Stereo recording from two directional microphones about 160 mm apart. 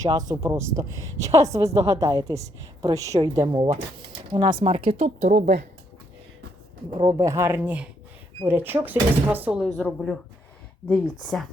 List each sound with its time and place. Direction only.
0.0 s a woman's voice: 25° right (ahead or behind); by 5.5 s 50° right (ahead or behind)
7.0 s speech: 20° right (ahead or behind); by 11.4 s 5° left (ahead or behind)